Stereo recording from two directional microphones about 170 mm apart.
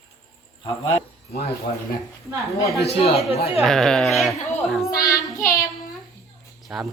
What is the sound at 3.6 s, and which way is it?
Speech, 5° left (ahead or behind).